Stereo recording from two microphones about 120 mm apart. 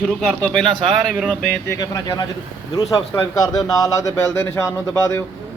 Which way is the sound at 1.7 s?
25° left (ahead or behind).